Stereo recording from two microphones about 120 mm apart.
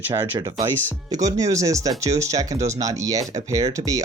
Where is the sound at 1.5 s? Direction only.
25° right (ahead or behind).